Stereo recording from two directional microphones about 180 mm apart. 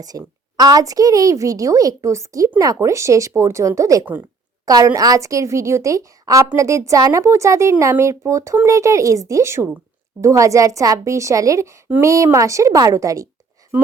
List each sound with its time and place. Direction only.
0.0 s a woman's voice: 20° right (ahead or behind)